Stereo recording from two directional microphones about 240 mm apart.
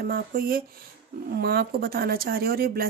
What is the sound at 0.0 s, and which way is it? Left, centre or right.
Speech, right.